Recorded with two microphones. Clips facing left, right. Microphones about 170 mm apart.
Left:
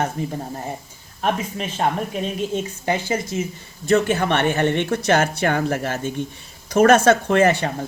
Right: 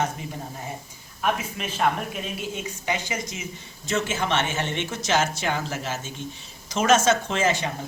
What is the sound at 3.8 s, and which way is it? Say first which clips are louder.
Speech: left 8 dB; 60° left (ahead or behind).